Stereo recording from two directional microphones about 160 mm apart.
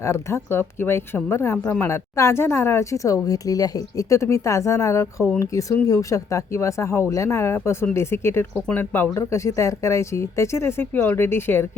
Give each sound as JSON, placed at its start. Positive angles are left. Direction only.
{"t": 0.0, "sound": "speech", "side_deg": 15}